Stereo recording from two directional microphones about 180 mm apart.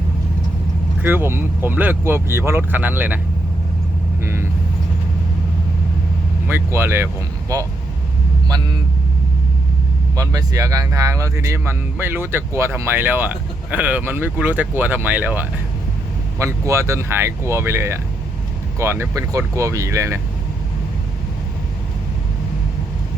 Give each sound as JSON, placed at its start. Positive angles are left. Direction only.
{"t": 1.0, "sound": "speech", "side_deg": -10}
{"t": 4.2, "sound": "vehicle", "side_deg": -15}
{"t": 6.5, "sound": "speech", "side_deg": -15}
{"t": 10.2, "sound": "speech", "side_deg": -20}